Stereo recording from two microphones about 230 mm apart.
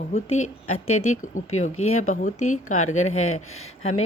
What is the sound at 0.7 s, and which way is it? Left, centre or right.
Speech, left.